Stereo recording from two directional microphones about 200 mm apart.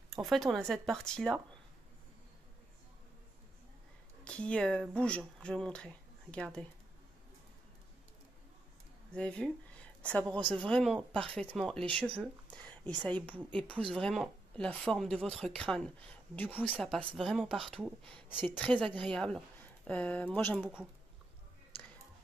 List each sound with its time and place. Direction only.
0.1 s a woman's voice: centre (ahead or behind)
4.2 s speech: 5° left (ahead or behind)
9.1 s a woman's voice: 5° left (ahead or behind)
12.5 s a sound: 5° left (ahead or behind)
13.6 s a woman's voice: 5° left (ahead or behind)